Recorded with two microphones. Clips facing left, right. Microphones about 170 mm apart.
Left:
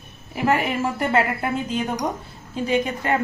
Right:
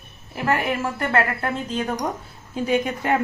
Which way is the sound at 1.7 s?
5° left (ahead or behind).